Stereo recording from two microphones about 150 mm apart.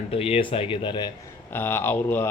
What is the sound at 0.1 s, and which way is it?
Speech, 40° left (ahead or behind).